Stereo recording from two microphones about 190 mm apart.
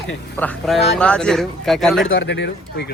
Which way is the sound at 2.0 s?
70° left (ahead or behind).